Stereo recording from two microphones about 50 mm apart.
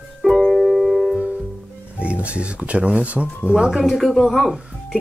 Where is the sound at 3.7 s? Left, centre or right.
Centre.